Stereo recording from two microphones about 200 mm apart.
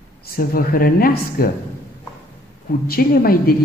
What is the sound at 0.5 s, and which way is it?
Speech, 45° left (ahead or behind).